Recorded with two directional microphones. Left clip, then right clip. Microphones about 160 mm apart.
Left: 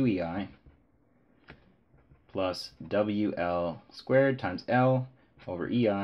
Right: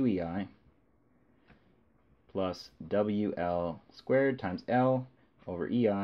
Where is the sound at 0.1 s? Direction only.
40° right (ahead or behind).